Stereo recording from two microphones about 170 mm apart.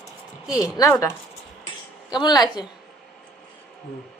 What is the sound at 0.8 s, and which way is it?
Speech, 20° left (ahead or behind).